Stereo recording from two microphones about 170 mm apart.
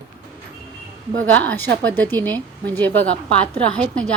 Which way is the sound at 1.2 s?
10° left (ahead or behind).